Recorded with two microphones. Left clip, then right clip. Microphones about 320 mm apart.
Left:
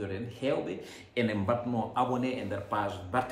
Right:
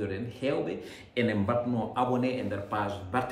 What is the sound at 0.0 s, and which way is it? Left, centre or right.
A man's voice, centre.